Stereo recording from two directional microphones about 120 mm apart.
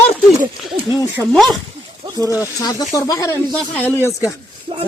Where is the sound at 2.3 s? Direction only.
25° left (ahead or behind).